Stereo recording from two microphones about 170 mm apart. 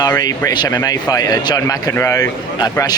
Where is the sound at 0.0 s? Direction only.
20° left (ahead or behind).